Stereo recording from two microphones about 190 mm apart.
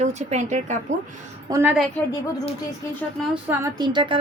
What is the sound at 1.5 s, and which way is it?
Speech, 15° right (ahead or behind).